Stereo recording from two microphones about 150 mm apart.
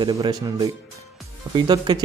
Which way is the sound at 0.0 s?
30° right (ahead or behind).